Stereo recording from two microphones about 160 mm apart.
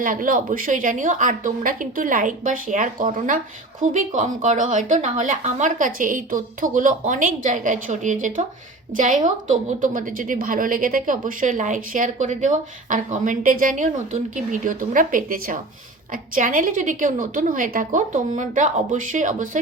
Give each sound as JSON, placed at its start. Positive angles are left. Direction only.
{"t": 0.0, "sound": "a woman's voice", "side_deg": -60}